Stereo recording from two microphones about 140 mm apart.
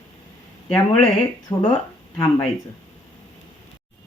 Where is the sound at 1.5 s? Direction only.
30° left (ahead or behind).